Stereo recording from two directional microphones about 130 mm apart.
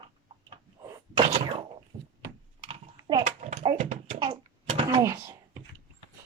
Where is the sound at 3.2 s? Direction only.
75° right (ahead or behind).